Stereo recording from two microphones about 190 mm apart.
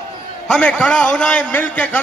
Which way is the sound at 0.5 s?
5° left (ahead or behind).